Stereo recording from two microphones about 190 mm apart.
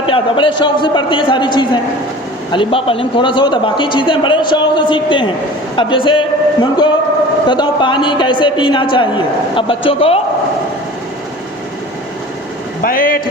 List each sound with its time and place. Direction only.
0.0 s a man's voice: 30° left (ahead or behind)
12.8 s a man's voice: 50° left (ahead or behind)